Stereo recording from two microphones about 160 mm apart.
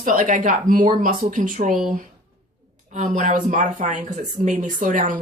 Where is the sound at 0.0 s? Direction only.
55° right (ahead or behind).